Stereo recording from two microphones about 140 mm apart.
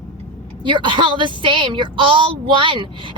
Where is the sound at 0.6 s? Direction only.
35° right (ahead or behind).